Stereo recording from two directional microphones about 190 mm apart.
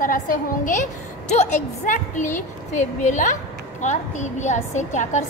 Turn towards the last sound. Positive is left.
turn(degrees=40)  # may be behind; listen again after turning